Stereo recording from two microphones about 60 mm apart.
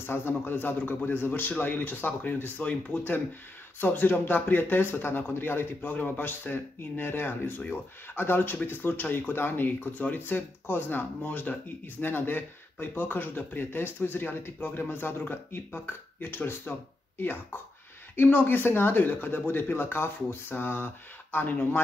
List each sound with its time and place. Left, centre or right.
0.0 s speech: left